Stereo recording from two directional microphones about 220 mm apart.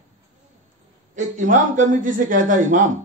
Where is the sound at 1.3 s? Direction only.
35° right (ahead or behind).